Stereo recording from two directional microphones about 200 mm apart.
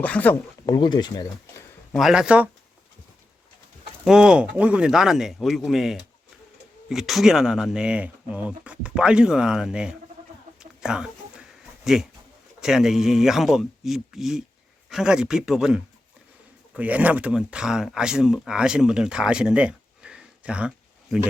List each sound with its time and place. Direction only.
0.0 s speech: 5° left (ahead or behind)
0.6 s speech: 20° left (ahead or behind)
1.9 s speech: centre (ahead or behind)
4.0 s speech: 5° right (ahead or behind)
10.6 s chicken: 5° right (ahead or behind)
11.9 s speech: 5° right (ahead or behind)